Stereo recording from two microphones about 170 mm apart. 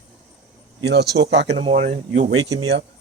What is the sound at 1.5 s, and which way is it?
Speech, 35° right (ahead or behind).